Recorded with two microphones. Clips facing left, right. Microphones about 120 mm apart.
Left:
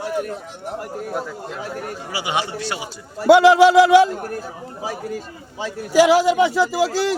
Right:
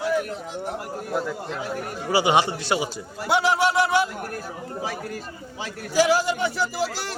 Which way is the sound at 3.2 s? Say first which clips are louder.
Left 10 dB; 90° left.